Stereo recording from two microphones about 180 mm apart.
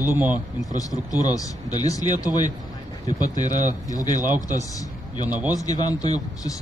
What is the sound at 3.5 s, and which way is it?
Speech, 45° right (ahead or behind).